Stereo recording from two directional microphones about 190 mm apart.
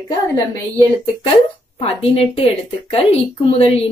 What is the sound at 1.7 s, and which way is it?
Speech, 30° left (ahead or behind).